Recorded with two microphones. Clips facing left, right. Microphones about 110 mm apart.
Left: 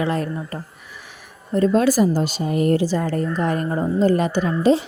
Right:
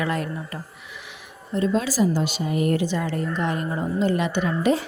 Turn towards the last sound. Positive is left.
turn(degrees=30)  # may be behind; listen again after turning